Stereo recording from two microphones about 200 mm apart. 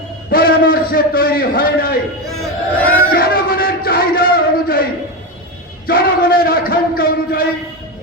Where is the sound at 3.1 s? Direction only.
50° left (ahead or behind).